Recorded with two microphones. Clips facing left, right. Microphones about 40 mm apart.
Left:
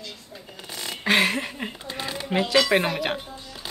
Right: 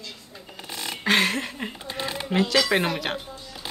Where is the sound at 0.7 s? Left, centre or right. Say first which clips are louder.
Right 1 dB; centre.